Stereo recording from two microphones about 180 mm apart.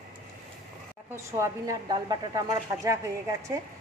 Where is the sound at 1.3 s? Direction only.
15° right (ahead or behind).